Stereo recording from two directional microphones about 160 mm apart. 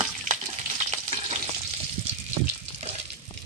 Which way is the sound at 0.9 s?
40° right (ahead or behind).